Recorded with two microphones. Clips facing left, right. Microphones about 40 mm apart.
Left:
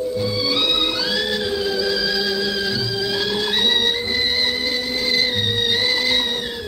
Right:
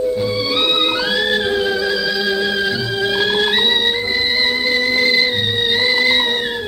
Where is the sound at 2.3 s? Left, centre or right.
Right.